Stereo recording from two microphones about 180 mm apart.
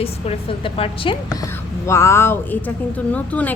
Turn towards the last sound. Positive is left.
turn(degrees=10)  # may be behind; listen again after turning